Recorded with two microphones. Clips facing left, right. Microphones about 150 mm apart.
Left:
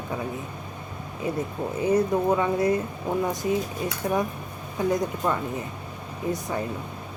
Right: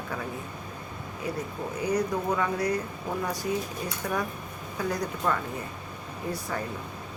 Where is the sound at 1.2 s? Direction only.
25° left (ahead or behind).